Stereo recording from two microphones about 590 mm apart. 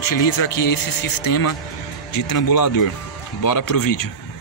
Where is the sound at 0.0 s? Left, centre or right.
Left.